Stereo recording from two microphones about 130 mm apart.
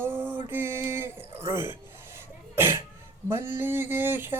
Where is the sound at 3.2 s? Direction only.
20° right (ahead or behind).